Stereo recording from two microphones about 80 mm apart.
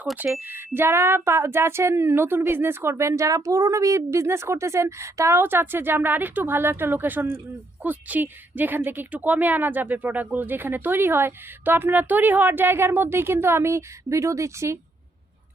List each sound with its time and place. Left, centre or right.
0.4 s a woman's voice: right
5.4 s a woman's voice: right